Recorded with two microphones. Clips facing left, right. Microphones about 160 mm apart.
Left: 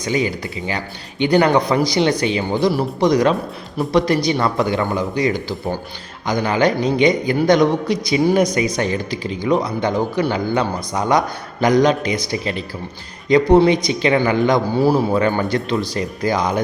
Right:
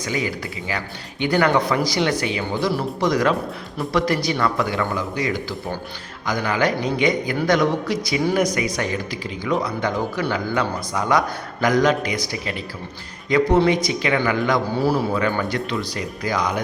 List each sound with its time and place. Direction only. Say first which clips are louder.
0.0 s speech: left 5 dB; 25° left (ahead or behind)
14.8 s a man's voice: left 4 dB; 40° left (ahead or behind); by 16.6 s 25° left (ahead or behind)